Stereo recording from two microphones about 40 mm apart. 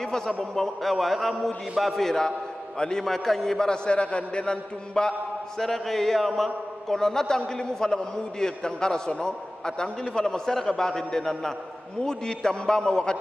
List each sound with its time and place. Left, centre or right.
0.4 s a man's voice: centre
5.6 s a man's voice: centre